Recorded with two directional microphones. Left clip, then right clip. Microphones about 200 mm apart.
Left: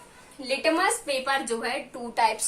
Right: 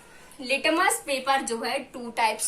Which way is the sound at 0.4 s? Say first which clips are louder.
Right 1 dB; 10° left (ahead or behind).